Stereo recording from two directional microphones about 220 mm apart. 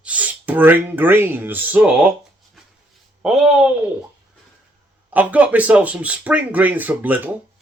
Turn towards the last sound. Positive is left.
turn(degrees=-10)  # may be behind; listen again after turning